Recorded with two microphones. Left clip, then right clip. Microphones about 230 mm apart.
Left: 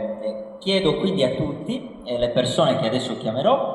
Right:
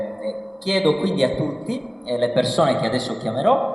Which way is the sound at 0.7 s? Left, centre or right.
Right.